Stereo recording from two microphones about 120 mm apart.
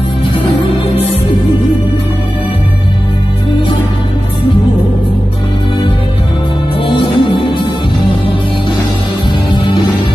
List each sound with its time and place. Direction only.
6.9 s music: 45° left (ahead or behind)